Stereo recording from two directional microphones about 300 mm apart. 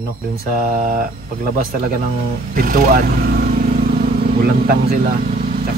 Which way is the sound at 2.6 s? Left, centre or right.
Right.